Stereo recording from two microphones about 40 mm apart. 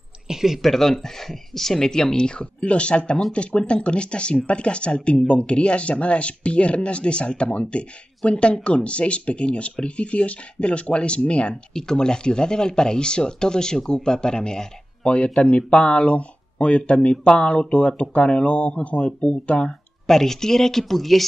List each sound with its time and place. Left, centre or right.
0.3 s a sound: centre
0.6 s speech: centre
15.0 s speech: left
20.1 s speech: centre